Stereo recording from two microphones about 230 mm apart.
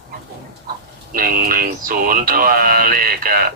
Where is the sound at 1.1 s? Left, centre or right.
Right.